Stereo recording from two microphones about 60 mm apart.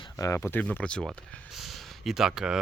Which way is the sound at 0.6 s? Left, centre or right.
Left.